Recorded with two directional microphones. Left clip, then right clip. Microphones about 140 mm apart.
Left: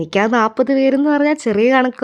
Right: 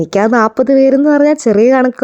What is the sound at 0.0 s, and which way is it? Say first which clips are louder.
Speech: right 4 dB; 55° right (ahead or behind).